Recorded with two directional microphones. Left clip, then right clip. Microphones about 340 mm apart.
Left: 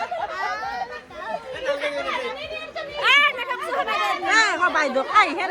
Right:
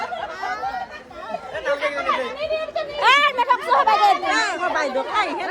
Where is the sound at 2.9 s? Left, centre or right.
Right.